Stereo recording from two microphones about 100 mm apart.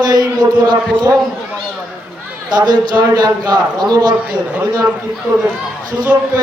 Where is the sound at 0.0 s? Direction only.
45° right (ahead or behind).